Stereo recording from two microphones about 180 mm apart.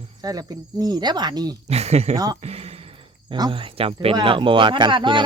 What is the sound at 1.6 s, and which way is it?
Speech, 35° right (ahead or behind).